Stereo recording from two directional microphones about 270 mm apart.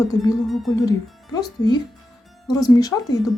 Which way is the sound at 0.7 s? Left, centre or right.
Centre.